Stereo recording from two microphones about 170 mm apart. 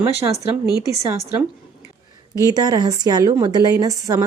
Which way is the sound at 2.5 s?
20° right (ahead or behind).